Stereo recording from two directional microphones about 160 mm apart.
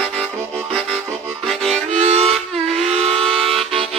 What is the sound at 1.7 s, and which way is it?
Harmonica, 40° right (ahead or behind).